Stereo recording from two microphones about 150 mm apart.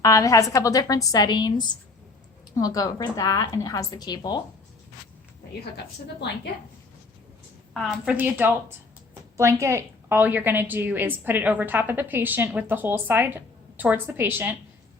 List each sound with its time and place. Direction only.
0.0 s a woman's voice: 20° left (ahead or behind)
7.7 s a woman's voice: centre (ahead or behind)
8.1 s a woman's voice: 10° right (ahead or behind)